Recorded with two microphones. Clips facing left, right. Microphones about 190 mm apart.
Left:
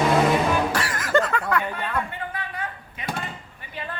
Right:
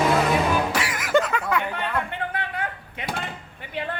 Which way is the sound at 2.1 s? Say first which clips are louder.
Right 3 dB; 65° right (ahead or behind).